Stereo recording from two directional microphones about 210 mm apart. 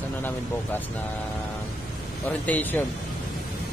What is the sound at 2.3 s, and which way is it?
Speech, 10° left (ahead or behind).